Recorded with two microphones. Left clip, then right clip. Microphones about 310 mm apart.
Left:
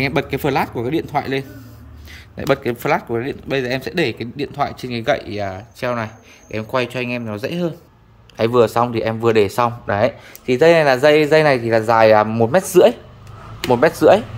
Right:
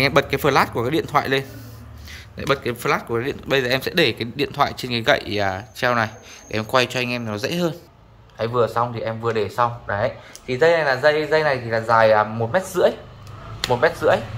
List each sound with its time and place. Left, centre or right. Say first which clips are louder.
0.0 s speech: right 2 dB; centre
8.4 s speech: left 5 dB; left